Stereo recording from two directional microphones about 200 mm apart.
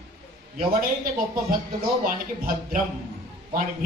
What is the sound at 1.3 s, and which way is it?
Speech, 45° right (ahead or behind).